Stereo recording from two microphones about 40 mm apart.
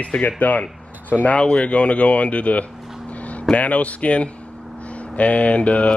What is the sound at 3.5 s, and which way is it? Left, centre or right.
Speech, left.